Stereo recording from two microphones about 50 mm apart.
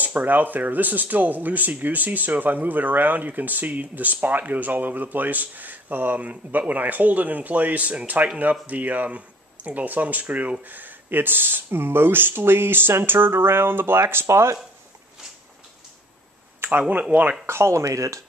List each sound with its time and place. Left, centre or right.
0.0 s speech: right
14.2 s speech: right
16.6 s a sound: right
17.1 s speech: right
17.5 s speech: right